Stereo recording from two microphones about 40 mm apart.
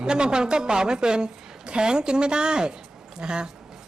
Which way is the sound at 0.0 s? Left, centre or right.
Right.